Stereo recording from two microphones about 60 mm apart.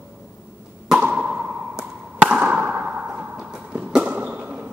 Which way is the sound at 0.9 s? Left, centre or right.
Right.